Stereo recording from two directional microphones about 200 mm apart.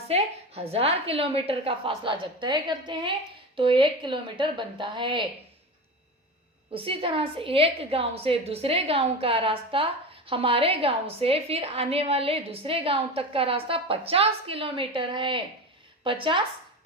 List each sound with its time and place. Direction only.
0.1 s a woman's voice: 30° right (ahead or behind)
6.7 s a woman's voice: 25° right (ahead or behind)